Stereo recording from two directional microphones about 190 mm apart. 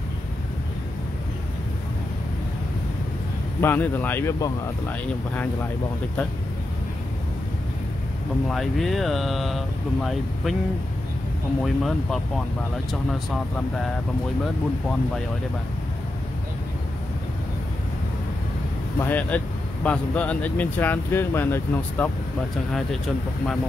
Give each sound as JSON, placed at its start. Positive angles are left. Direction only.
{"t": 3.6, "sound": "speech", "side_deg": 10}
{"t": 8.5, "sound": "speech", "side_deg": 0}
{"t": 11.6, "sound": "speech", "side_deg": 0}
{"t": 18.9, "sound": "speech", "side_deg": 10}